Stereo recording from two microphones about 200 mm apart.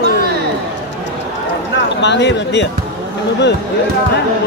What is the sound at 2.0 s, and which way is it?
Speech, 60° left (ahead or behind).